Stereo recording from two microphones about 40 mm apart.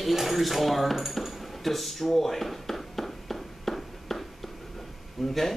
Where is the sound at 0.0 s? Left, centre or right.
Centre.